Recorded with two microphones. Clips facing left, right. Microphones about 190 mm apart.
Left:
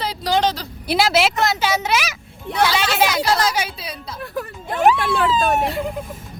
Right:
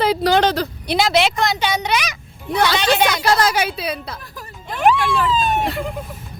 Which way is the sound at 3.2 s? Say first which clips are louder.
Right 2 dB; 55° right (ahead or behind).